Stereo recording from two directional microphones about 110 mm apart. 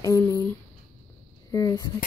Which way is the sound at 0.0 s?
30° left (ahead or behind).